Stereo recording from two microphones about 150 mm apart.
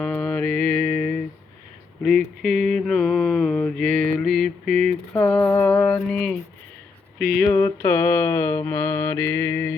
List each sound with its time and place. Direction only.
0.0 s mantra: 10° left (ahead or behind)
7.4 s mantra: 15° left (ahead or behind)